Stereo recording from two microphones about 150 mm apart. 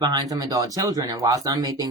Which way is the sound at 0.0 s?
25° right (ahead or behind).